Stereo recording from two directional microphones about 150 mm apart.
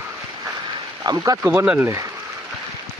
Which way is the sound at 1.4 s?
10° right (ahead or behind).